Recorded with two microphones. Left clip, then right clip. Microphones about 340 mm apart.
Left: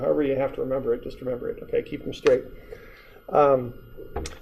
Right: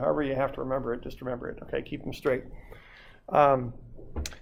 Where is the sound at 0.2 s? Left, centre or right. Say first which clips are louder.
Left 4 dB; right.